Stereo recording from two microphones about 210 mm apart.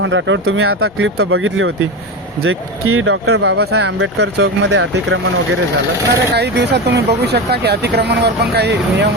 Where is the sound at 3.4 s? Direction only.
50° right (ahead or behind).